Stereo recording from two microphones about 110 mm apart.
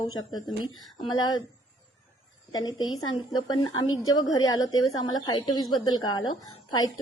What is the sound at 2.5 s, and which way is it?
A woman's voice, 35° left (ahead or behind).